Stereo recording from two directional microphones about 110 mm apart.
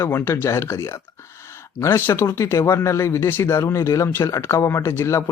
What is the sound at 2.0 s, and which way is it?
Speech, 25° left (ahead or behind).